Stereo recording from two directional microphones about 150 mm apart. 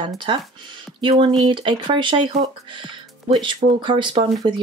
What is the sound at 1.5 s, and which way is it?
Speech, 35° right (ahead or behind).